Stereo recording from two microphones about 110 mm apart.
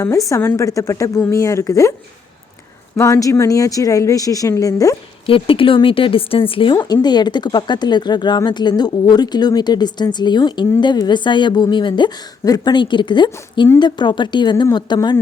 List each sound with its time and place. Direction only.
0.3 s a woman's voice: 25° left (ahead or behind)
3.0 s speech: 30° left (ahead or behind)
5.2 s speech: 55° left (ahead or behind)
6.7 s a woman's voice: 35° left (ahead or behind)